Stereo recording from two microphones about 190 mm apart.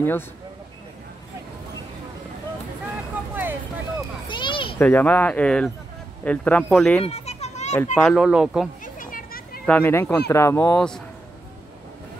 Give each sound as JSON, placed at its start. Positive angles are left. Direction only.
{"t": 3.3, "sound": "a sound", "side_deg": -10}
{"t": 4.3, "sound": "children playing", "side_deg": 25}
{"t": 4.7, "sound": "a child's voice", "side_deg": 10}
{"t": 7.1, "sound": "children playing", "side_deg": 35}
{"t": 7.9, "sound": "a child's voice", "side_deg": 5}
{"t": 8.8, "sound": "children playing", "side_deg": 45}
{"t": 9.7, "sound": "speech", "side_deg": 10}